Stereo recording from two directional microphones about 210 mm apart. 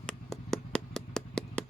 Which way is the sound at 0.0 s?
5° left (ahead or behind).